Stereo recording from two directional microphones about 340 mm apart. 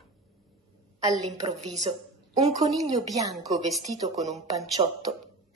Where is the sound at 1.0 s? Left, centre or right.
Centre.